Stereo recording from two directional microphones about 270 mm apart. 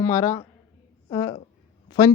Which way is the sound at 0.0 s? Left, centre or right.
Centre.